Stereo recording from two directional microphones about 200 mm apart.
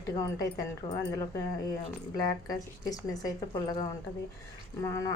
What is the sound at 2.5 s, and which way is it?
A woman's voice, 20° left (ahead or behind).